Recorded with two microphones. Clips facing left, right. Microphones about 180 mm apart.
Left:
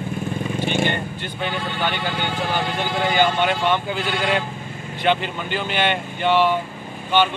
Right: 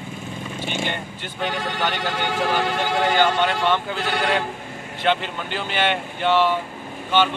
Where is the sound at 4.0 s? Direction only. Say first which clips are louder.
Even; 70° right (ahead or behind).